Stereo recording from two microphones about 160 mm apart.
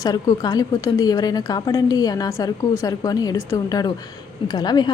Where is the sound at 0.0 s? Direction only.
25° left (ahead or behind).